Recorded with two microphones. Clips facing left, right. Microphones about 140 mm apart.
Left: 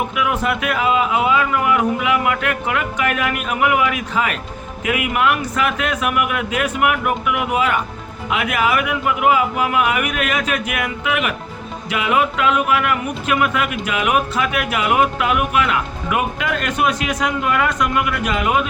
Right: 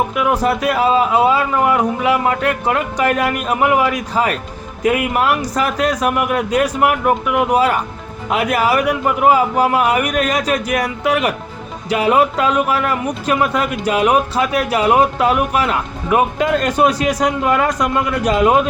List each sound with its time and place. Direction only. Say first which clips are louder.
0.1 s speech: right 4 dB; 35° right (ahead or behind)